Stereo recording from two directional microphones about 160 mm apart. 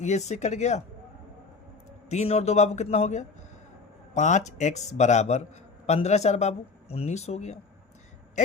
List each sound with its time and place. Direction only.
0.0 s a man's voice: 45° left (ahead or behind)
2.0 s a man's voice: 40° left (ahead or behind)